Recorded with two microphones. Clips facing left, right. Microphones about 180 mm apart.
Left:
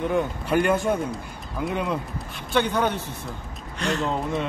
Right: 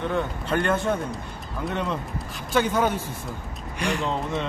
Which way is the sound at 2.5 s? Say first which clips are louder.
Even; 5° right (ahead or behind).